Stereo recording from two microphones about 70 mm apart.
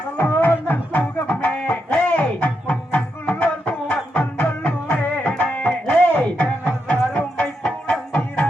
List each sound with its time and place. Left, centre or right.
0.2 s music: left